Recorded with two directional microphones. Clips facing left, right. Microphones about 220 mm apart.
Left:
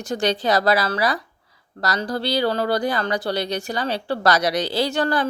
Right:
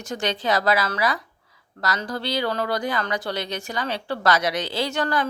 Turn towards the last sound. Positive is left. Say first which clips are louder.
# left 3 dB
turn(degrees=30)  # may be behind; listen again after turning